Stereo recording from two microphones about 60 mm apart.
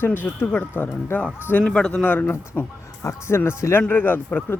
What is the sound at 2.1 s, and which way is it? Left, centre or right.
Speech, left.